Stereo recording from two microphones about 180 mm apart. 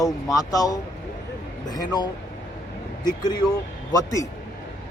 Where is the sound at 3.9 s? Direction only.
20° left (ahead or behind).